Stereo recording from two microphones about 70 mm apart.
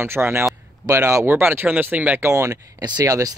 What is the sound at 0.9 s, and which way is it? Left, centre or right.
Speech, right.